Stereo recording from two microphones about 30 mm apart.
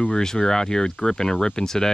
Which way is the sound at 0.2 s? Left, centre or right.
Centre.